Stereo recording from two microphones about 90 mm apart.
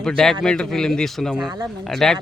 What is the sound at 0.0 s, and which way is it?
Speech, 5° left (ahead or behind).